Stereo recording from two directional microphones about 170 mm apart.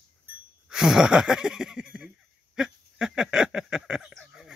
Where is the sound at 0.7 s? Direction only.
Centre (ahead or behind).